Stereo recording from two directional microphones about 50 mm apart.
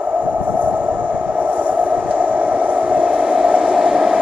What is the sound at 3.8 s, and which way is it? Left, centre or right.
Train, right.